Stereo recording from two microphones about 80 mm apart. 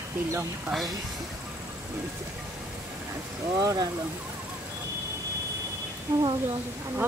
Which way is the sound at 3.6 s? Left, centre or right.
Right.